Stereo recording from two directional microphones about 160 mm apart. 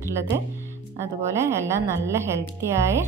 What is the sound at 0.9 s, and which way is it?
Speech, 15° right (ahead or behind).